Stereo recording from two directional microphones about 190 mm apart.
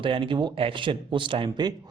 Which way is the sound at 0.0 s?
25° right (ahead or behind).